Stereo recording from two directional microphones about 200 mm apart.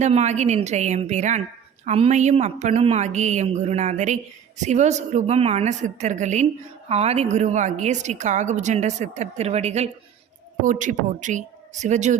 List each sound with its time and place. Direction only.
0.0 s speech: 35° right (ahead or behind)